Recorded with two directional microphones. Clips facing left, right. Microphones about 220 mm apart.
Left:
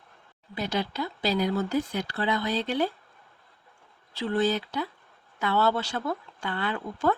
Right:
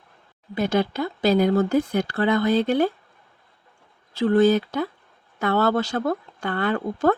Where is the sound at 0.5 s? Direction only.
50° right (ahead or behind).